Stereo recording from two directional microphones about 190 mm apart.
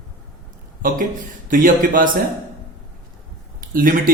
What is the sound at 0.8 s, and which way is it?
A man's voice, 45° right (ahead or behind).